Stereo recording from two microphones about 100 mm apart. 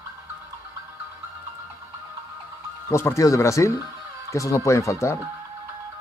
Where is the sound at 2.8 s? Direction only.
30° left (ahead or behind).